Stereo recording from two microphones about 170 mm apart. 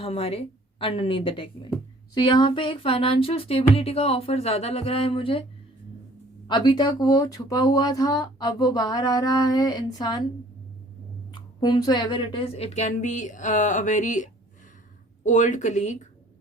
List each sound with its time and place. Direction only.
0.0 s speech: 35° left (ahead or behind)
6.5 s speech: 25° left (ahead or behind)
11.3 s speech: 25° left (ahead or behind); by 16.0 s 45° left (ahead or behind)